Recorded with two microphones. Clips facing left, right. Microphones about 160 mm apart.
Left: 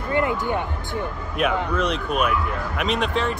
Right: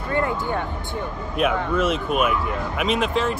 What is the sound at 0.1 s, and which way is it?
Music, 15° left (ahead or behind).